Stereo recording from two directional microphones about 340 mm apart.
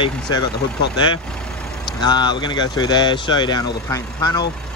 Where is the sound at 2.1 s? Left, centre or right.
Centre.